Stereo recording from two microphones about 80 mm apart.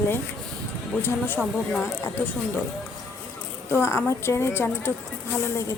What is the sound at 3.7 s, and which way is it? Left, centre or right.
A woman's voice, left.